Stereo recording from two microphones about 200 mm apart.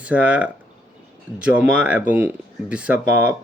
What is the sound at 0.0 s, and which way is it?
Speech, 5° right (ahead or behind).